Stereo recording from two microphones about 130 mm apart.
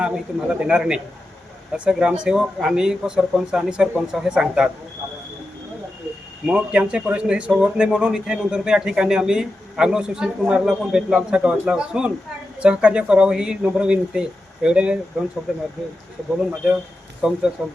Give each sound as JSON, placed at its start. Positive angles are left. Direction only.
{"t": 0.0, "sound": "speech", "side_deg": -5}
{"t": 6.4, "sound": "speech", "side_deg": -5}
{"t": 17.2, "sound": "speech", "side_deg": -5}